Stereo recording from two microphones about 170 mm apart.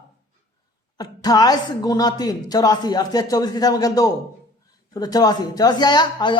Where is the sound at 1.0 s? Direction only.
25° left (ahead or behind).